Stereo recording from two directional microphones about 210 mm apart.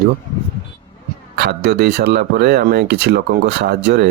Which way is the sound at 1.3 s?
50° right (ahead or behind).